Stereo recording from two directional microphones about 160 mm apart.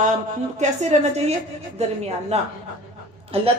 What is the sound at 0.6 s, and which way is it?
A woman's voice, 45° right (ahead or behind).